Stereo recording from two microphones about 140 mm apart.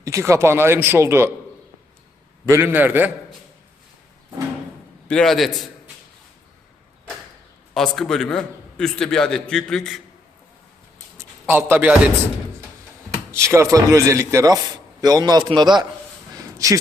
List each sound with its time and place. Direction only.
0.0 s a man's voice: 20° right (ahead or behind)
2.5 s a man's voice: 15° right (ahead or behind)
5.0 s a man's voice: 5° left (ahead or behind)
7.7 s a man's voice: 5° left (ahead or behind)
11.4 s a man's voice: 15° right (ahead or behind)
13.3 s a man's voice: 20° right (ahead or behind)